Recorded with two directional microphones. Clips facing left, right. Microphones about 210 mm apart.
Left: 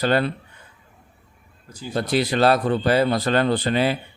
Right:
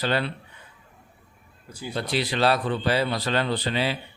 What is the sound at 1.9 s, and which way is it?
Speech, 45° left (ahead or behind).